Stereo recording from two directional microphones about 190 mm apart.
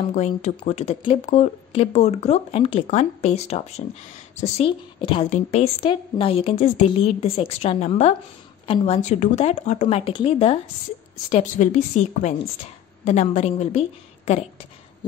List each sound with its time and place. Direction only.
0.0 s speech: 35° left (ahead or behind)